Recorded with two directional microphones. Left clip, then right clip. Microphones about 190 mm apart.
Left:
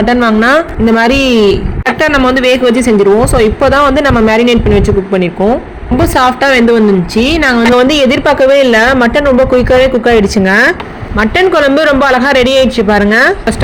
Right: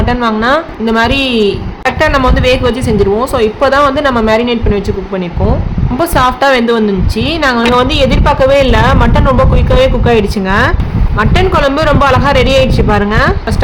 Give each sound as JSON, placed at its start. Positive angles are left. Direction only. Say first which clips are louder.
{"t": 0.0, "sound": "a woman's voice", "louder": "left 3 dB", "side_deg": 25}
{"t": 6.0, "sound": "a woman's voice", "louder": "left 1 dB", "side_deg": 15}
{"t": 8.4, "sound": "a woman's voice", "louder": "left 2 dB", "side_deg": 10}